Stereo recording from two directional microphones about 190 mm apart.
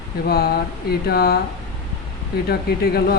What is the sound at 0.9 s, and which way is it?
Speech, 55° left (ahead or behind).